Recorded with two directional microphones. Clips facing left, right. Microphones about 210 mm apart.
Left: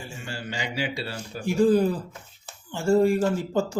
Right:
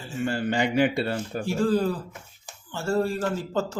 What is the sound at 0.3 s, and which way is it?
A man's voice, 55° right (ahead or behind).